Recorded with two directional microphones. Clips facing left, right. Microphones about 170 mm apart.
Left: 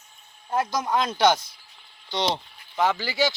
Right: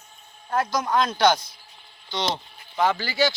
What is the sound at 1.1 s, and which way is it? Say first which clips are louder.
Speech: left 2 dB; 5° left (ahead or behind).